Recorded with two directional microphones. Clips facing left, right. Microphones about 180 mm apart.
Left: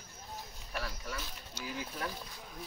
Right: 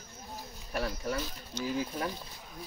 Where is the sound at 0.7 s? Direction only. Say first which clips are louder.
Right 8 dB; 40° right (ahead or behind).